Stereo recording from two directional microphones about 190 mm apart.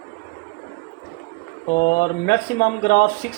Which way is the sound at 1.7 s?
45° left (ahead or behind).